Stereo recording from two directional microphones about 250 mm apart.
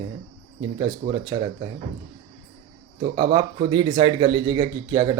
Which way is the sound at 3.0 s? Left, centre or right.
Centre.